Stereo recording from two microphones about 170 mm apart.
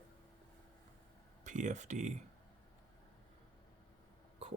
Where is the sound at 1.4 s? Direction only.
45° right (ahead or behind).